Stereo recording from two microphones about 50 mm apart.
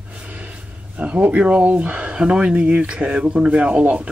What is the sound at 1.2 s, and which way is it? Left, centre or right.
Speech, right.